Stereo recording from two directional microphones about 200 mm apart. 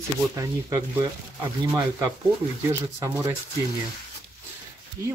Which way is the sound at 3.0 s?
15° right (ahead or behind).